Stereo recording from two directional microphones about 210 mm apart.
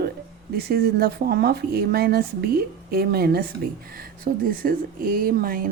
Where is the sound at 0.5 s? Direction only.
50° right (ahead or behind).